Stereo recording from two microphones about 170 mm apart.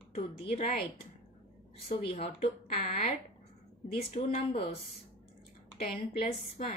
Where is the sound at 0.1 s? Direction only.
40° left (ahead or behind).